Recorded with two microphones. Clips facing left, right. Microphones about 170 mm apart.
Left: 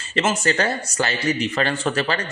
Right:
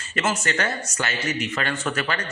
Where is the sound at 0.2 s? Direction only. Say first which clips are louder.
Left 4 dB; 30° left (ahead or behind).